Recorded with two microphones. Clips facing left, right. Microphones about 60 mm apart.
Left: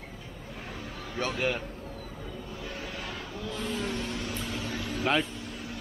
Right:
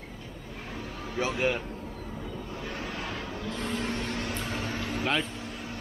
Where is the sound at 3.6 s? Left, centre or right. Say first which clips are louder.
Right 1 dB; right.